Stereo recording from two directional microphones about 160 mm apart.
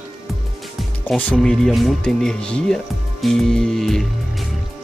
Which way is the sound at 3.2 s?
5° left (ahead or behind).